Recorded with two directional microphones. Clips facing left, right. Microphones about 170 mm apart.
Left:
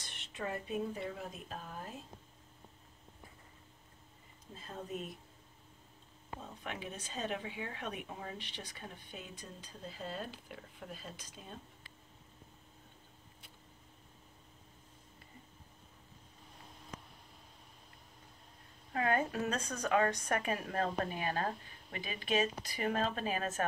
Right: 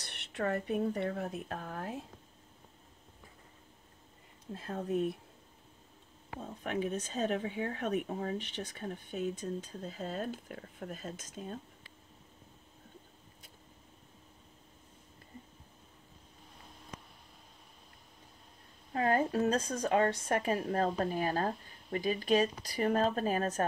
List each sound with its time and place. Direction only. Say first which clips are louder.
0.0 s speech: right 7 dB; 70° right (ahead or behind)
6.6 s speech: right 12 dB; 45° right (ahead or behind)
18.9 s a woman's voice: right 4 dB; 30° right (ahead or behind)